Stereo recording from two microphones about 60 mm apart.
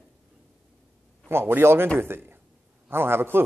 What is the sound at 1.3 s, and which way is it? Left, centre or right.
A man's voice, right.